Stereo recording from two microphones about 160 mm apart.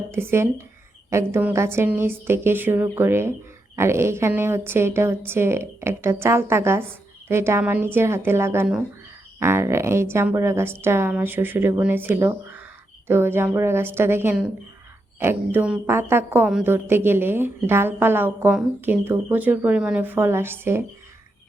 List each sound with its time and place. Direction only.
0.1 s a woman's voice: 15° right (ahead or behind)